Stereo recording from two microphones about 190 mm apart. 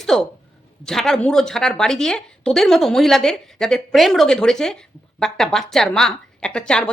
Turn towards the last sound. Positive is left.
turn(degrees=5)  # may be behind; listen again after turning